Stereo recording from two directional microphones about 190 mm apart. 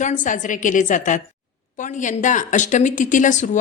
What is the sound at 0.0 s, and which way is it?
Speech, 40° left (ahead or behind).